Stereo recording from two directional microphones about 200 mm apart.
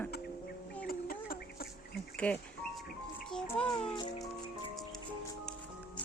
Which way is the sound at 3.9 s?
20° left (ahead or behind).